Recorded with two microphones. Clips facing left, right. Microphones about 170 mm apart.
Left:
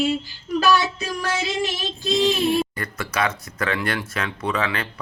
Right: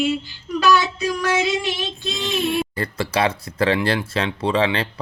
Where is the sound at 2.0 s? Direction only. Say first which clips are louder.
Left 5 dB; 35° left (ahead or behind).